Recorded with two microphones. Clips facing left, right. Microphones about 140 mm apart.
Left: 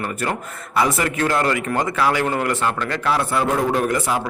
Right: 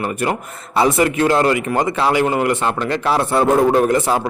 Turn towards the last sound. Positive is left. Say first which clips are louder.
# right 5 dB
turn(degrees=-30)  # may be behind; listen again after turning